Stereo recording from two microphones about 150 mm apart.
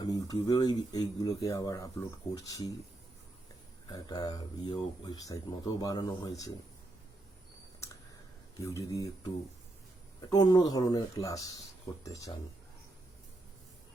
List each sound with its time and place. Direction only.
0.0 s speech: 25° left (ahead or behind)
4.1 s speech: 25° left (ahead or behind)
8.7 s speech: 20° left (ahead or behind)
10.3 s speech: 25° left (ahead or behind)